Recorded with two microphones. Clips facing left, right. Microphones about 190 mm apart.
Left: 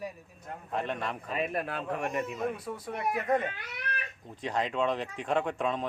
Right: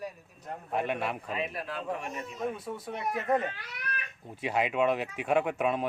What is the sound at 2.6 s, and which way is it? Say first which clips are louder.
Speech: even; centre (ahead or behind).